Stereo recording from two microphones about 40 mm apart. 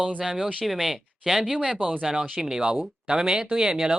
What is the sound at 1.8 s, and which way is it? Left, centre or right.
Speech, right.